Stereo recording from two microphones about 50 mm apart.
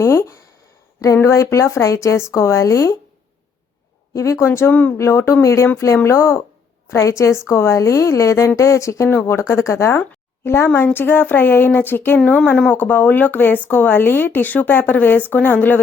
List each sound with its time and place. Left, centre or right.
0.0 s speech: left
4.1 s a woman's voice: left
4.4 s a sound: left
4.7 s speech: left
4.9 s speech: left
6.1 s a woman's voice: left
9.2 s speech: left
10.9 s a sound: left
12.2 s speech: left
12.7 s speech: left